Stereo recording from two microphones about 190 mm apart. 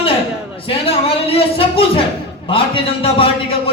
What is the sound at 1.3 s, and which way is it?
A man's voice, 30° left (ahead or behind).